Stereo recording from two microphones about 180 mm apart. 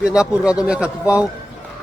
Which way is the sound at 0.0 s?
5° right (ahead or behind).